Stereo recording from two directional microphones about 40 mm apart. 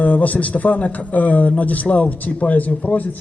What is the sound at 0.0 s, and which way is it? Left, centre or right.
A man's voice, left.